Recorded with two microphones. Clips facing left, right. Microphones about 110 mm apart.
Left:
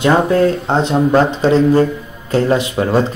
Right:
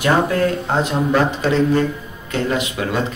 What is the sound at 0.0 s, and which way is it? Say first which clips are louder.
Speech: left 5 dB; 25° left (ahead or behind).